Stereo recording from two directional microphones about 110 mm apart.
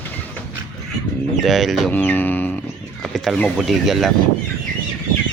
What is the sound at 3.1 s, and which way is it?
Speech, centre (ahead or behind).